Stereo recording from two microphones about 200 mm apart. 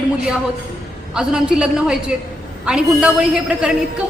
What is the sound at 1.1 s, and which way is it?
A woman's voice, 5° right (ahead or behind).